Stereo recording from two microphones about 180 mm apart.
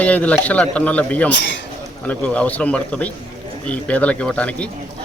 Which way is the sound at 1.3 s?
80° left.